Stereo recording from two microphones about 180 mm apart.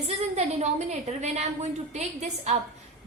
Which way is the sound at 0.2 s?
40° right (ahead or behind).